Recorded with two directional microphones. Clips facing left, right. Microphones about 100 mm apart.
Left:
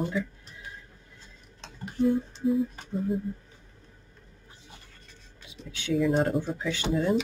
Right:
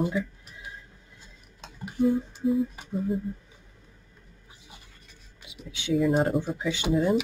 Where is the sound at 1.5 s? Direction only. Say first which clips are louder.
Right 1 dB; 10° right (ahead or behind).